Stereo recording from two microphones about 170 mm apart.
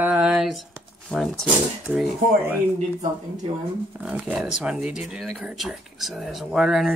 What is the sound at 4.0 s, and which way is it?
A woman's voice, 10° right (ahead or behind).